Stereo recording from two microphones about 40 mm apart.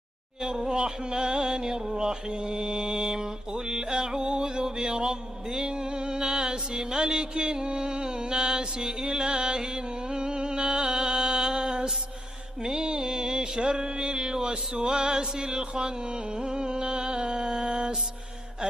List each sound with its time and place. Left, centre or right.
0.4 s music: centre
12.6 s mantra: centre